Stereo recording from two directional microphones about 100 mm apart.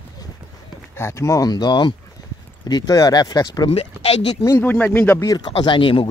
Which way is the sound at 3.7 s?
90° left.